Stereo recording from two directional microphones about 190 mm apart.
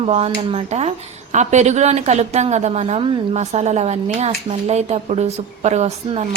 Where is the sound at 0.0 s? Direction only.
35° right (ahead or behind).